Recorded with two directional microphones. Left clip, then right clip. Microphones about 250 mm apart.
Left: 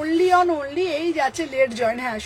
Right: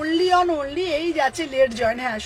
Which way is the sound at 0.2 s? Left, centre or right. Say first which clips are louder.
Left 2 dB; centre.